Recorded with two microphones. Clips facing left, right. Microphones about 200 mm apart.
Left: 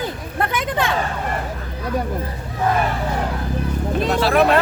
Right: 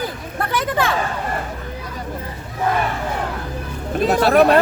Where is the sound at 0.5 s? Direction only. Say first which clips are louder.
Right 4 dB; 20° left (ahead or behind).